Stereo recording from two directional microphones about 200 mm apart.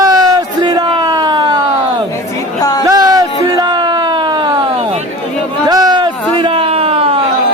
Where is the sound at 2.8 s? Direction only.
20° right (ahead or behind).